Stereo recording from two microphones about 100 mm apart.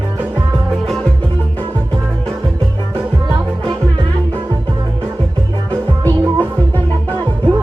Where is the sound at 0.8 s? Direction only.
5° left (ahead or behind).